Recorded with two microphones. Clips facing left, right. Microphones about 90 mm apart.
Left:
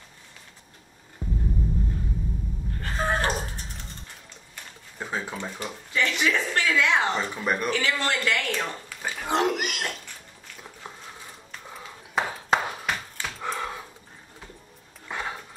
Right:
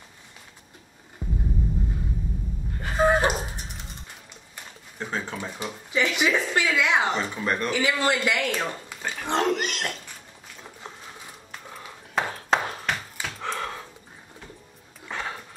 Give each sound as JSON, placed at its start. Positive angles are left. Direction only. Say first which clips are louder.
{"t": 1.2, "sound": "music", "louder": "even", "side_deg": 0}
{"t": 2.8, "sound": "a sound", "louder": "right 6 dB", "side_deg": -15}
{"t": 4.9, "sound": "speech", "louder": "right 1 dB", "side_deg": 5}
{"t": 5.4, "sound": "speech", "louder": "right 1 dB", "side_deg": -10}
{"t": 7.3, "sound": "speech", "louder": "even", "side_deg": 10}
{"t": 7.7, "sound": "speech", "louder": "right 3 dB", "side_deg": -15}
{"t": 9.0, "sound": "speech", "louder": "even", "side_deg": 5}
{"t": 11.7, "sound": "a sound", "louder": "even", "side_deg": 5}
{"t": 15.0, "sound": "a sound", "louder": "even", "side_deg": 10}